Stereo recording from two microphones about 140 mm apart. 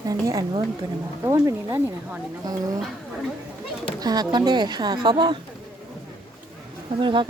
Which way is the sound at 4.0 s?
30° right (ahead or behind).